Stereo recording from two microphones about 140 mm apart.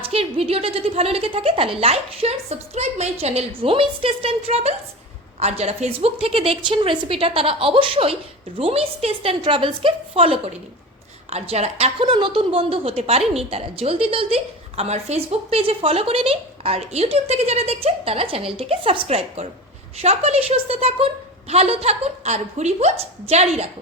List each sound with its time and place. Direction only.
0.0 s a woman's voice: 45° right (ahead or behind)
12.0 s a woman's voice: 35° right (ahead or behind); by 23.6 s 50° right (ahead or behind)